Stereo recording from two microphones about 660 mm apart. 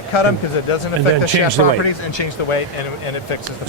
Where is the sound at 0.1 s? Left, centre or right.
Left.